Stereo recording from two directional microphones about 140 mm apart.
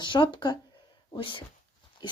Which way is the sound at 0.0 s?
35° left (ahead or behind).